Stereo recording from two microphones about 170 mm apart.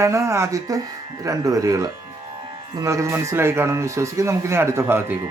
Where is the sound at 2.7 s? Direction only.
15° right (ahead or behind).